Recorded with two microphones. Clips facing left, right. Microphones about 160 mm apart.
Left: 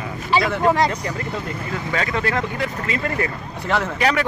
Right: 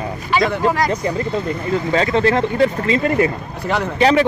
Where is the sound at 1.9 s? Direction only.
30° right (ahead or behind).